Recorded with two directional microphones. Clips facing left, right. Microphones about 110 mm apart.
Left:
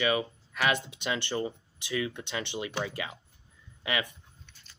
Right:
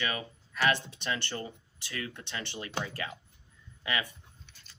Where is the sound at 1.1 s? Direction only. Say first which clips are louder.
Left 5 dB; 20° left (ahead or behind).